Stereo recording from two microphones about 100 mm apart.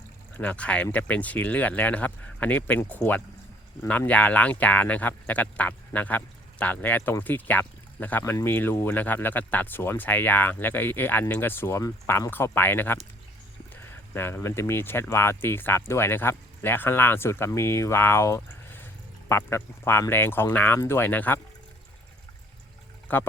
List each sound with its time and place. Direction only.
0.3 s speech: 15° left (ahead or behind)
23.1 s speech: 20° left (ahead or behind)